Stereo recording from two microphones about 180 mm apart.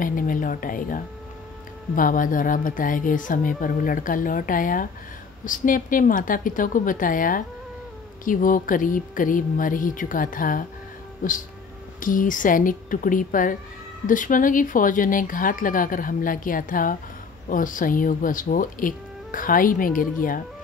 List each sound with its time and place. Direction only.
0.0 s speech: 50° left (ahead or behind)
12.0 s speech: 50° left (ahead or behind)